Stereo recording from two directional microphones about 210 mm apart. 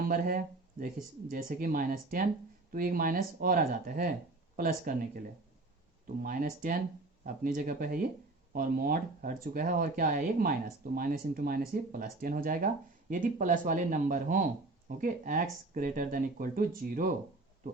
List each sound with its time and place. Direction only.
0.0 s speech: 40° right (ahead or behind)
6.2 s speech: 40° right (ahead or behind)